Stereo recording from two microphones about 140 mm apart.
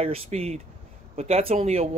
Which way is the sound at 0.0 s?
45° right (ahead or behind).